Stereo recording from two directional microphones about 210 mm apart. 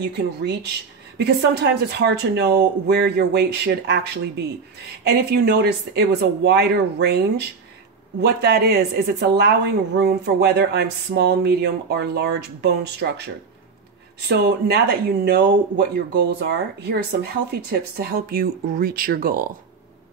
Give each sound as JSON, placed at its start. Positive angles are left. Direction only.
{"t": 0.0, "sound": "speech", "side_deg": -55}